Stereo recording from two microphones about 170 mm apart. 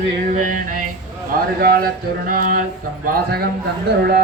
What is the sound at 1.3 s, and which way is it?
Speech, 60° right (ahead or behind).